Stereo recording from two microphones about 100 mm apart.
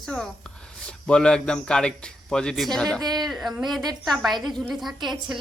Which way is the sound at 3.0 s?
45° right (ahead or behind).